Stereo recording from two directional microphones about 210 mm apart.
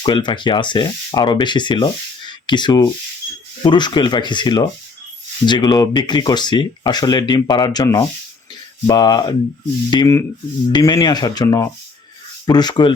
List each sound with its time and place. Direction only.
0.0 s speech: 20° left (ahead or behind)